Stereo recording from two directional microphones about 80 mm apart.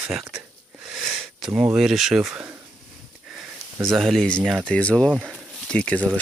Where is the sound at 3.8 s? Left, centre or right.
Centre.